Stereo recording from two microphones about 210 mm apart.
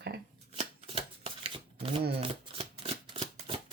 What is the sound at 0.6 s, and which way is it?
Shuffling cards, 30° right (ahead or behind).